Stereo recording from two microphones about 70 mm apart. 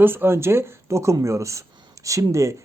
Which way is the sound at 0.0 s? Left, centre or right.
Right.